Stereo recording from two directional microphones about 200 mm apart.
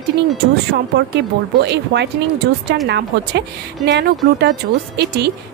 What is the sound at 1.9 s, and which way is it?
Speech, 65° right (ahead or behind).